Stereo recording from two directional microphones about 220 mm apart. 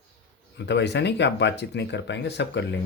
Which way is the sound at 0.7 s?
50° left (ahead or behind).